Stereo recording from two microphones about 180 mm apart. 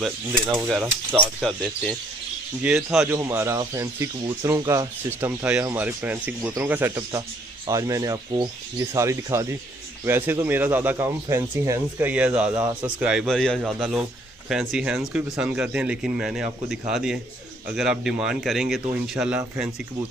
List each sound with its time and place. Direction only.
0.0 s speech: centre (ahead or behind)
2.6 s speech: 5° right (ahead or behind)